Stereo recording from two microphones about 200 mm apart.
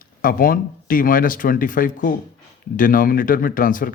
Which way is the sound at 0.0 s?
45° left (ahead or behind).